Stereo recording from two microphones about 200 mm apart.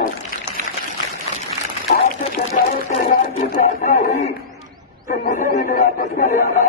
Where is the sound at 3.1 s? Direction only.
45° left (ahead or behind).